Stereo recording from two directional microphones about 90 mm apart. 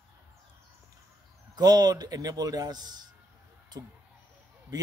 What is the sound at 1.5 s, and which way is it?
A man's voice, 50° right (ahead or behind).